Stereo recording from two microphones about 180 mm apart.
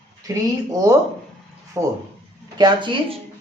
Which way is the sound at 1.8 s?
15° right (ahead or behind).